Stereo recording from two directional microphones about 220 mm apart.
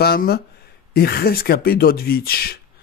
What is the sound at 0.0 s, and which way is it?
Speech, 45° left (ahead or behind).